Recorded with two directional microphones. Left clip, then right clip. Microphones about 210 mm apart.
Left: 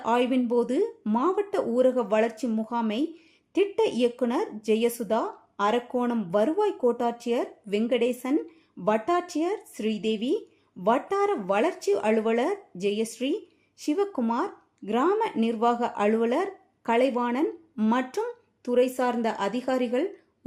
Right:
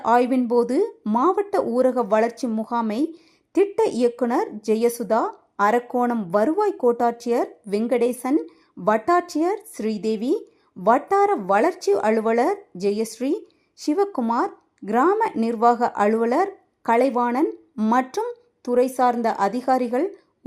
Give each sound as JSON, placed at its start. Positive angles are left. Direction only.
{"t": 0.0, "sound": "speech", "side_deg": -20}